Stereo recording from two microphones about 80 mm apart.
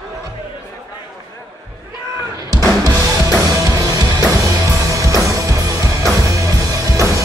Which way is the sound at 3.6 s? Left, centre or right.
Right.